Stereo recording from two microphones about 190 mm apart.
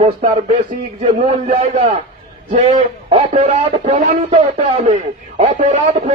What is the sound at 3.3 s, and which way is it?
Speech, 30° right (ahead or behind).